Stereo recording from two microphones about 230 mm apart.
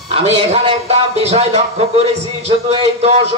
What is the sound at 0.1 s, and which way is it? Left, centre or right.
Speech, right.